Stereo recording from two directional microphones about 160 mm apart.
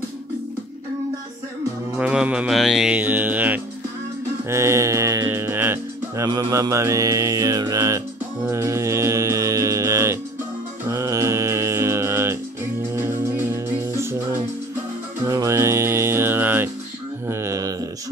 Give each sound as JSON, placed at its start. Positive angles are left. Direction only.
{"t": 2.0, "sound": "music", "side_deg": -10}
{"t": 4.5, "sound": "speech", "side_deg": -15}
{"t": 8.5, "sound": "music", "side_deg": -15}
{"t": 10.9, "sound": "mantra", "side_deg": -20}
{"t": 12.9, "sound": "music", "side_deg": -15}
{"t": 15.2, "sound": "music", "side_deg": -20}
{"t": 17.3, "sound": "a sound", "side_deg": -15}